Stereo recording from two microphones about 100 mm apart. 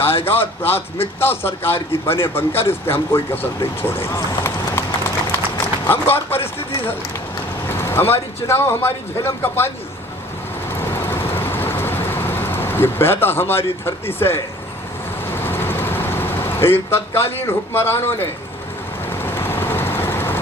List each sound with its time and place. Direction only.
0.0 s speech: 70° left (ahead or behind)
0.3 s a man's voice: 20° left (ahead or behind)
3.8 s run: 25° left (ahead or behind)
5.9 s a man's voice: 20° left (ahead or behind)
7.7 s a man's voice: 25° left (ahead or behind)
10.7 s vehicle: 25° left (ahead or behind)